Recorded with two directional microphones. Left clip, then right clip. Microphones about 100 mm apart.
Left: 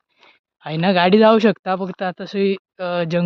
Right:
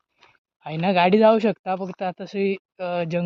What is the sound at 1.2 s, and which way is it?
Speech, 70° left (ahead or behind).